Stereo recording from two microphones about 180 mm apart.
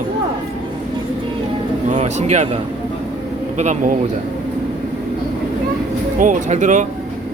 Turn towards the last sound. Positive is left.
turn(degrees=-45)  # may be behind; listen again after turning